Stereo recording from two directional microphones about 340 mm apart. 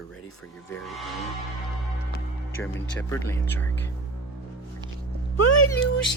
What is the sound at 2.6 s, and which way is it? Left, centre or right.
Speech, centre.